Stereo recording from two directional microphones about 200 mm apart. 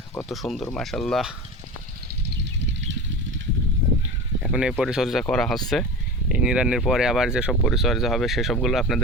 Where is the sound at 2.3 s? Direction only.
60° right (ahead or behind).